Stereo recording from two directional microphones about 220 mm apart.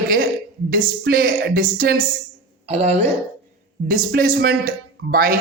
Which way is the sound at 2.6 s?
30° right (ahead or behind).